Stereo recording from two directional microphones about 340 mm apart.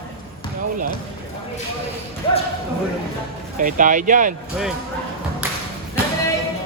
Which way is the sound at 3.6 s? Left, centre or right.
Right.